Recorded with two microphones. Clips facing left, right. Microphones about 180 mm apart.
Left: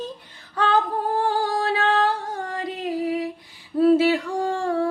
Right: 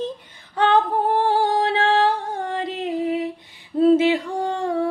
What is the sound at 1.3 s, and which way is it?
Music, 25° right (ahead or behind).